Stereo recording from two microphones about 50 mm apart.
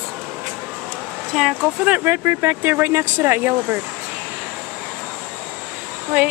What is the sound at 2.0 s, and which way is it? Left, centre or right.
Speech, right.